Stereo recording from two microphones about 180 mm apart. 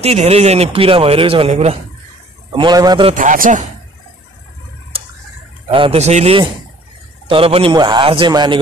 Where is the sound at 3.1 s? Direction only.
45° right (ahead or behind).